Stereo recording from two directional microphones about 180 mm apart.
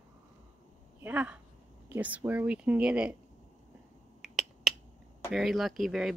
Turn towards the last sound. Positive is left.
turn(degrees=0)  # may be behind; listen again after turning